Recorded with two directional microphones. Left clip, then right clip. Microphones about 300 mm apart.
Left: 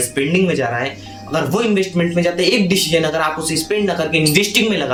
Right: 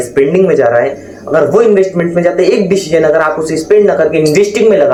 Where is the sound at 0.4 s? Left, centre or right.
Left.